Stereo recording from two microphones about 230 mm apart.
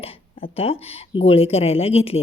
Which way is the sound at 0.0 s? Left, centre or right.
Left.